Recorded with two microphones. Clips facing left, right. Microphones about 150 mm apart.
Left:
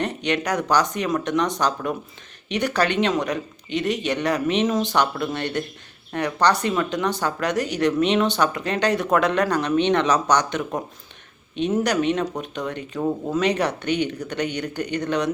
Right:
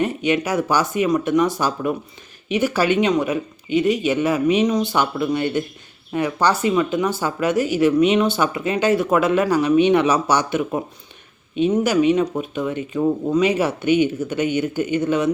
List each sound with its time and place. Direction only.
0.0 s speech: 5° right (ahead or behind)